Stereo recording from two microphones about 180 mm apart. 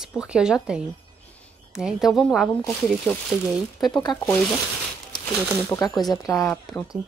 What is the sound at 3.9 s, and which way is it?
Speech, 25° left (ahead or behind).